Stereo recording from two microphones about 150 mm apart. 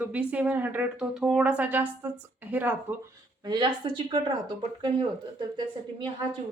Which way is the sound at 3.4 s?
30° right (ahead or behind).